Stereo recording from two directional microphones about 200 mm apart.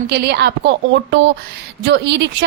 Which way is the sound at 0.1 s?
55° right (ahead or behind).